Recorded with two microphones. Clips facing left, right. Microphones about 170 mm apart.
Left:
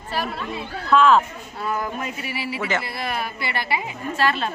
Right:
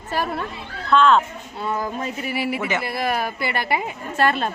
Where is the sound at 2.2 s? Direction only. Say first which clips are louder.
Right 6 dB; 50° right (ahead or behind).